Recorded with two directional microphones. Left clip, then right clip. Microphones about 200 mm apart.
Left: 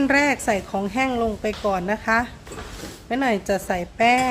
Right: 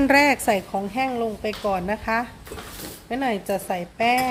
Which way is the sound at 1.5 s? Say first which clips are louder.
Left 1 dB; 5° left (ahead or behind).